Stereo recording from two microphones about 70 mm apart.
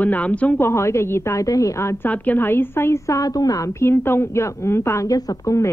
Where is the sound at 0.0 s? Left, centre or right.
Left.